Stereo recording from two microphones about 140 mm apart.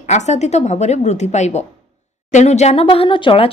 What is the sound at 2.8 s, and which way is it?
Speech, 40° left (ahead or behind).